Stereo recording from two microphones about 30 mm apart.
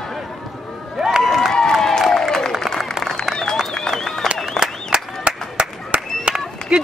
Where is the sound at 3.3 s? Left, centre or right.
Centre.